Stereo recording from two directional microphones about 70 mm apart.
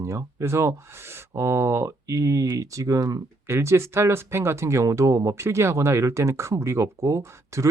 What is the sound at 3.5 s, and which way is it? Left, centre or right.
Speech, right.